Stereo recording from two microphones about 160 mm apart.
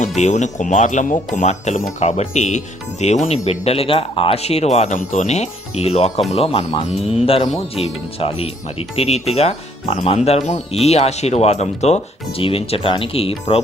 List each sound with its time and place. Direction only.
0.2 s speech: 45° left (ahead or behind)